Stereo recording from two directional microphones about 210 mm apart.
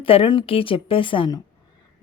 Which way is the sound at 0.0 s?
25° left (ahead or behind).